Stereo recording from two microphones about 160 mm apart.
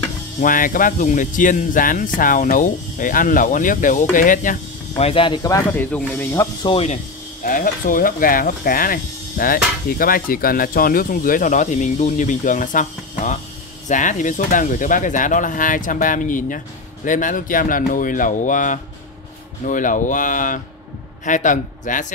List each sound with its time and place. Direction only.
0.4 s speech: 55° left (ahead or behind)
5.0 s speech: 35° left (ahead or behind)
6.7 s speech: 40° left (ahead or behind)
7.4 s a man's voice: 60° left (ahead or behind)